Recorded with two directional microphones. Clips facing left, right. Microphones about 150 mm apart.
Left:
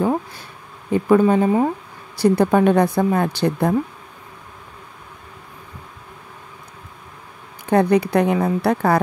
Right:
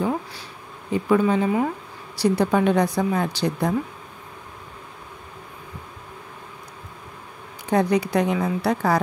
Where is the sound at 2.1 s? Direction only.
50° left (ahead or behind).